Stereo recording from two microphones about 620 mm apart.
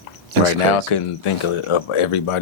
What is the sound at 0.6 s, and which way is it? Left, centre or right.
Speech, left.